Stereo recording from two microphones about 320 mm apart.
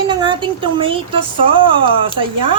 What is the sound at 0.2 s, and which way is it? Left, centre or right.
Speech, centre.